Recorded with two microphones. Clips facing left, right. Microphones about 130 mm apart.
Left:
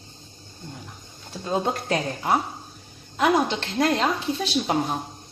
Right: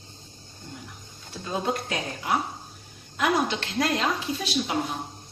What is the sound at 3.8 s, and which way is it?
Speech, 40° left (ahead or behind).